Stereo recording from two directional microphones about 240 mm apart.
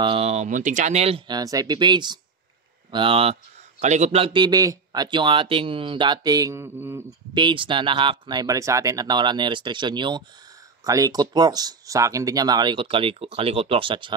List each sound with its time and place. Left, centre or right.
0.0 s speech: right